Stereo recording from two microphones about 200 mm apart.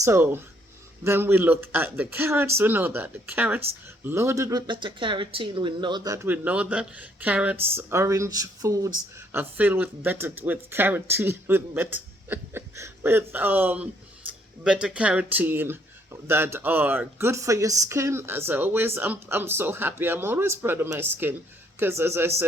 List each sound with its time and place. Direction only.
0.0 s speech: 10° right (ahead or behind)
6.2 s speech: 10° right (ahead or behind)